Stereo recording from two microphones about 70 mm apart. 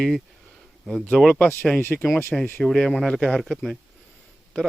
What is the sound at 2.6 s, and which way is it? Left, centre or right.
Speech, centre.